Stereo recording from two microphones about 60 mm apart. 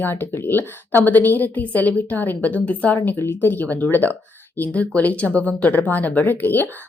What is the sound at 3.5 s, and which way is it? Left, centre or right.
Speech, left.